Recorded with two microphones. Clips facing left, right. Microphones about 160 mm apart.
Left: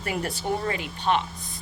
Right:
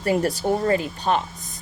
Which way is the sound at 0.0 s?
40° right (ahead or behind).